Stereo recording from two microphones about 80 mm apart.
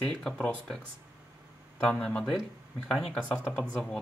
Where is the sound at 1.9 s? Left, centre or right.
Centre.